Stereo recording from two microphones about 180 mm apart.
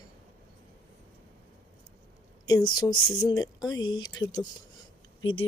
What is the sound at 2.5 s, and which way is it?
Speech, 20° left (ahead or behind).